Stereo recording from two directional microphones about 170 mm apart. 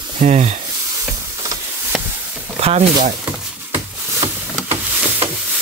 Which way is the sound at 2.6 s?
35° right (ahead or behind).